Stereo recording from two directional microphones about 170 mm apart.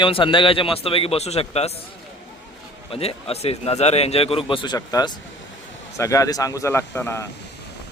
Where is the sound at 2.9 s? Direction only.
35° left (ahead or behind); by 7.2 s 15° left (ahead or behind).